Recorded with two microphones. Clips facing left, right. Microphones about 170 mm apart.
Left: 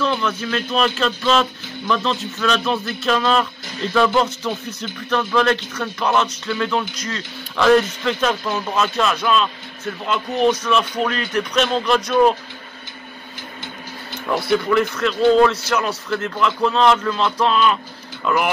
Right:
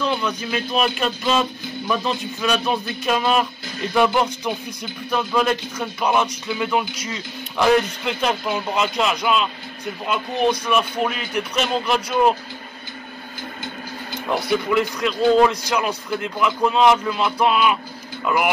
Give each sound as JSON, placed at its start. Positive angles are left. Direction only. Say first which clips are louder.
{"t": 0.0, "sound": "speech", "louder": "left 2 dB", "side_deg": -15}
{"t": 14.7, "sound": "speech", "louder": "left 2 dB", "side_deg": -10}